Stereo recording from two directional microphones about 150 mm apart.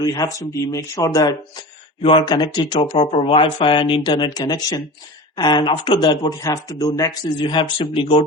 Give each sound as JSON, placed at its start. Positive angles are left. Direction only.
{"t": 0.0, "sound": "speech", "side_deg": 25}